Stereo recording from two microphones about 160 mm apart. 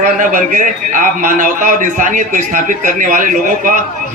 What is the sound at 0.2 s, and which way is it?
A man's voice, 55° right (ahead or behind).